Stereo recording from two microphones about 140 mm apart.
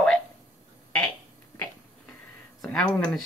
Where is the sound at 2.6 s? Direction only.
5° left (ahead or behind).